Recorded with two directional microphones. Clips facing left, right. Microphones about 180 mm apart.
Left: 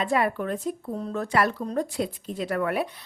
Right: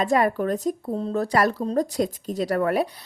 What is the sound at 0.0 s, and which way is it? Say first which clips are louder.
A woman's voice: right 4 dB; 40° right (ahead or behind).